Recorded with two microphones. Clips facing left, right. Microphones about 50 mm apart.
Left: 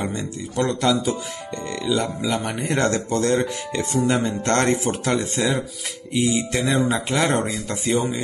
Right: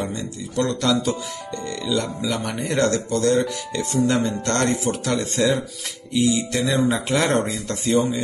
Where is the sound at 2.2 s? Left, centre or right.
Left.